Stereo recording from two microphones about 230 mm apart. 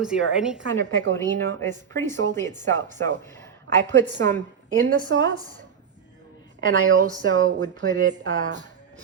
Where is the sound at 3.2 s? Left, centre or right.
Centre.